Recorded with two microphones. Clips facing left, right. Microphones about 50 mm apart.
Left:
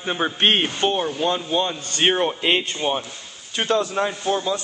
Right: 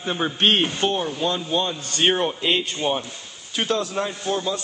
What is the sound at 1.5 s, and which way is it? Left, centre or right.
A man's voice, centre.